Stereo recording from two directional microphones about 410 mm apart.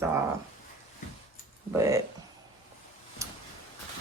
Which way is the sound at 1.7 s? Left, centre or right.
Centre.